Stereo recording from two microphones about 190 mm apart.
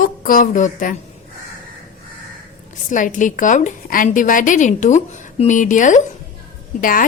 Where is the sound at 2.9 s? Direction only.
40° left (ahead or behind).